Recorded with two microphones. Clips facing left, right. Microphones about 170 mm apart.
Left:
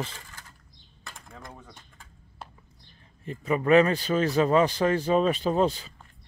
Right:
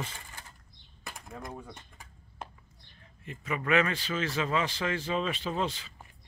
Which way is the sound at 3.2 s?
35° left (ahead or behind).